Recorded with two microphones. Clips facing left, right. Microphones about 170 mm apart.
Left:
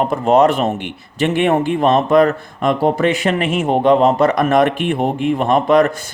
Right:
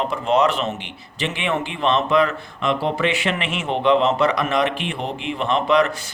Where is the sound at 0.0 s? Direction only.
50° left (ahead or behind).